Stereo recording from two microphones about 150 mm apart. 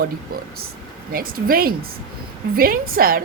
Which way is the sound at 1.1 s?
75° right (ahead or behind).